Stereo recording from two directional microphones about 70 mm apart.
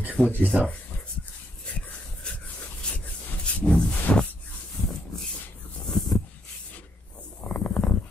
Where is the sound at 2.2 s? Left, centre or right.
Centre.